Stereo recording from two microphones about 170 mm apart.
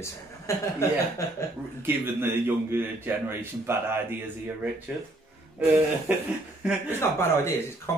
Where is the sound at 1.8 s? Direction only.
15° right (ahead or behind).